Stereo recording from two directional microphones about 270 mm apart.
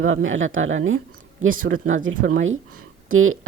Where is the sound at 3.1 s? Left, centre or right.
Right.